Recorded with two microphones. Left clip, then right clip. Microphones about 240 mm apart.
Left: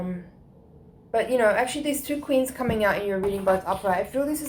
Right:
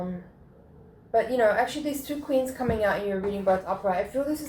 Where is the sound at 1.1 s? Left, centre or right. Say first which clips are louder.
Left 1 dB; left.